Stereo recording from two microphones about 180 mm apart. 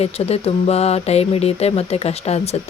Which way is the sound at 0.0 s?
35° left (ahead or behind).